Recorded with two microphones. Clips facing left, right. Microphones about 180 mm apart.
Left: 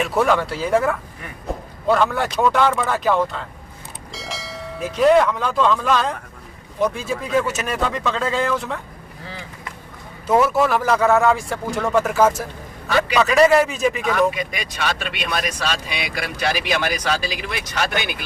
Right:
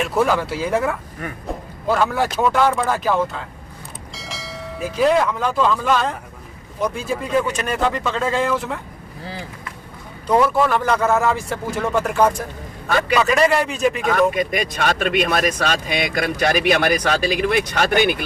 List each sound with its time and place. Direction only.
0.0 s speech: centre (ahead or behind)
9.2 s vehicle: 35° right (ahead or behind)
10.2 s speech: 5° left (ahead or behind)
14.0 s speech: 45° right (ahead or behind)